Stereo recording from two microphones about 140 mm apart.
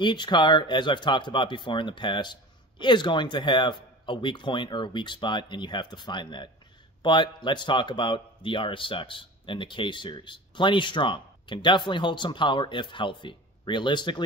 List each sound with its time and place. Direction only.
0.0 s speech: 35° left (ahead or behind)